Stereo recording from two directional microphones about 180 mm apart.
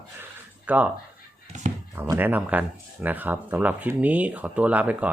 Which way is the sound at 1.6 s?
40° right (ahead or behind).